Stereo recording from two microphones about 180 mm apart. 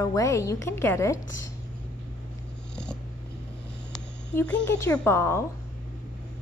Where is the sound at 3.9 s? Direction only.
5° left (ahead or behind).